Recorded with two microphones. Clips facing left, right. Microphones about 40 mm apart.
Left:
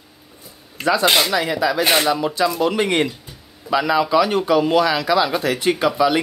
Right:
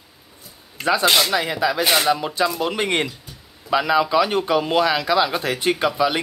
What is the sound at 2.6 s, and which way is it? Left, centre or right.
A man's voice, right.